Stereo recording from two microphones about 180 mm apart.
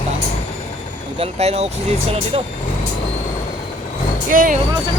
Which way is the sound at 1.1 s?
35° right (ahead or behind).